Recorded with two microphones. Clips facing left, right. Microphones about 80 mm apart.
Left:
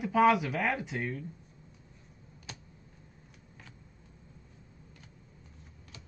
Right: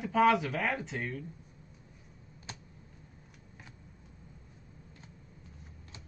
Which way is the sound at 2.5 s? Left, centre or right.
Right.